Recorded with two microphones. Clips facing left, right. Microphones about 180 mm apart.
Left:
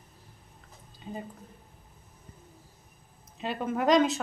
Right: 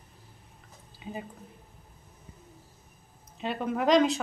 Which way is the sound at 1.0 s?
5° right (ahead or behind).